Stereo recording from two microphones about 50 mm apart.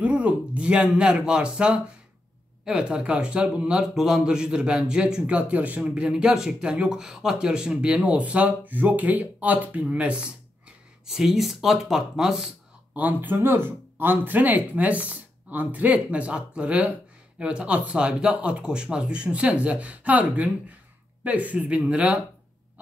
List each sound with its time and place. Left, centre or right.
0.0 s speech: right
3.9 s speech: centre
5.2 s speech: right
5.9 s speech: centre
11.1 s speech: centre
12.9 s speech: right
13.4 s speech: right